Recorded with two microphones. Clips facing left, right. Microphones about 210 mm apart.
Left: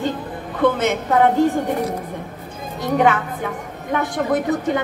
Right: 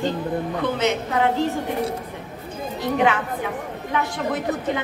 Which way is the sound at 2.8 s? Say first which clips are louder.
Left 3 dB; 45° left (ahead or behind).